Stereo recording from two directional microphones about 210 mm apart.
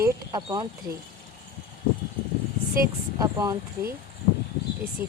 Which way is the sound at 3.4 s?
15° right (ahead or behind).